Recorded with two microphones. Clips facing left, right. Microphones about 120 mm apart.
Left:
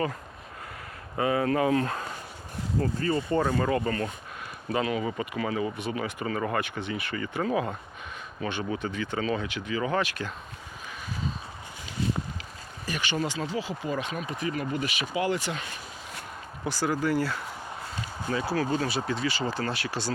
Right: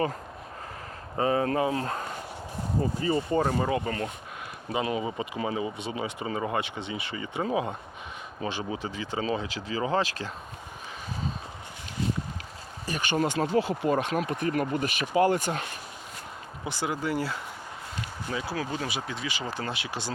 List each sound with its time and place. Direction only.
1.1 s speech: 35° right (ahead or behind)
2.8 s speech: 15° right (ahead or behind); by 10.3 s 35° right (ahead or behind)
12.8 s a sound: 35° right (ahead or behind)
13.1 s speech: 55° right (ahead or behind)
16.6 s speech: 20° right (ahead or behind)